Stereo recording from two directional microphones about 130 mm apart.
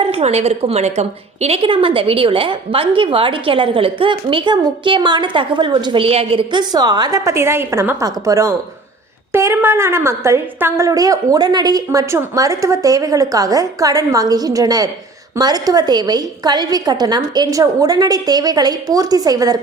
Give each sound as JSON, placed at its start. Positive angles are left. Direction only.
{"t": 0.0, "sound": "a woman's voice", "side_deg": -50}
{"t": 6.5, "sound": "a woman's voice", "side_deg": -30}